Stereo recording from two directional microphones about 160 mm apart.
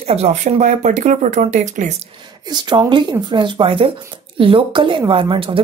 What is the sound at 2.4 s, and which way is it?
Speech, 25° right (ahead or behind).